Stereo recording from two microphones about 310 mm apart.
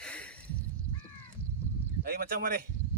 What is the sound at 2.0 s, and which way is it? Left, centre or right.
Speech, right.